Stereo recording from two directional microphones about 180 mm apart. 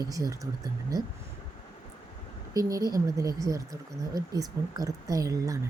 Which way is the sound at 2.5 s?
20° right (ahead or behind).